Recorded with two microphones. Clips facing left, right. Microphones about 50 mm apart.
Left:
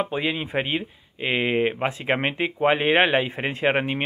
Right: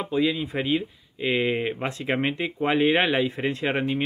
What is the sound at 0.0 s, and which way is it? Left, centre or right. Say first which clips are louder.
Speech: right 1 dB; left.